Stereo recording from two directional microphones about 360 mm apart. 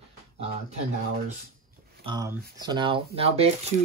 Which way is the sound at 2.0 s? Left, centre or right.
Centre.